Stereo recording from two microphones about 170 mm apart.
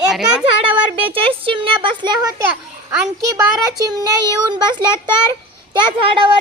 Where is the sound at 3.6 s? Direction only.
20° right (ahead or behind).